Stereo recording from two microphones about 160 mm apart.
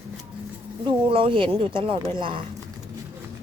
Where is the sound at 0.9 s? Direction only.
30° right (ahead or behind).